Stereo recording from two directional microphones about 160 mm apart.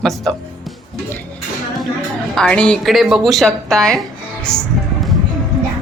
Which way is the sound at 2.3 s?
5° left (ahead or behind).